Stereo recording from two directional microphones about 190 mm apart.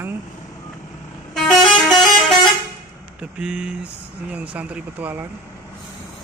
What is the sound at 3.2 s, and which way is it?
Speech, 5° right (ahead or behind).